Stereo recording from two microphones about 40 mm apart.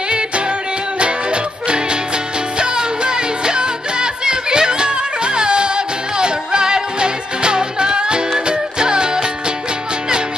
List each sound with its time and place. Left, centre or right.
0.9 s music: right